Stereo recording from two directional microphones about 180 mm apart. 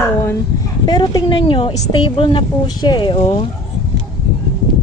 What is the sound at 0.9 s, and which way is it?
A woman's voice, 25° left (ahead or behind).